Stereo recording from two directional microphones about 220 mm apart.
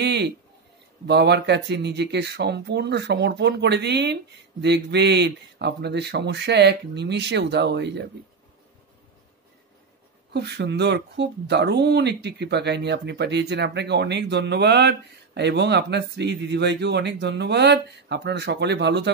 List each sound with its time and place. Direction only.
0.0 s a sound: 50° right (ahead or behind)
1.0 s speech: 50° right (ahead or behind)
10.3 s speech: 50° right (ahead or behind)